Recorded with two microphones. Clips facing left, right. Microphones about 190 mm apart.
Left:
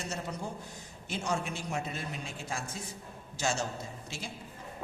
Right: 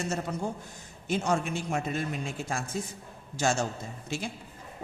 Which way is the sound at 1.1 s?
50° right (ahead or behind).